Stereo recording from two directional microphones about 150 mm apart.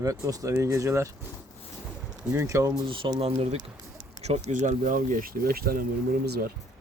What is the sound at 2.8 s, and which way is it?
Speech, 35° right (ahead or behind).